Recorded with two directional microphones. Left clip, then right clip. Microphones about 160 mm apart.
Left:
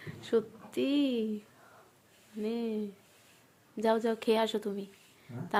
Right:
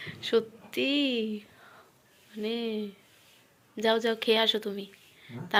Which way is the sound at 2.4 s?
5° left (ahead or behind).